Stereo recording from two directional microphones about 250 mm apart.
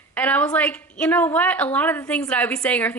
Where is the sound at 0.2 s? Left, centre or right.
Centre.